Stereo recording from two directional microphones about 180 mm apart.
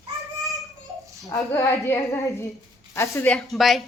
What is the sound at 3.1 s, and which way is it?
Speech, 5° left (ahead or behind).